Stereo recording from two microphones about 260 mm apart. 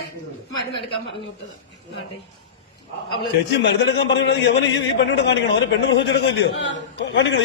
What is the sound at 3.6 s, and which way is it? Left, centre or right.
A man's voice, left.